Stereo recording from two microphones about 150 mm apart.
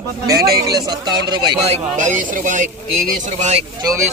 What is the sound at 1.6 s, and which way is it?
Speech, 50° right (ahead or behind).